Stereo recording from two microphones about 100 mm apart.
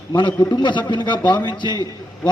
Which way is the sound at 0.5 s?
50° left (ahead or behind).